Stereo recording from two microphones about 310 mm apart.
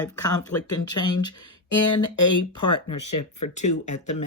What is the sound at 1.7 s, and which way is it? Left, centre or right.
Speech, left.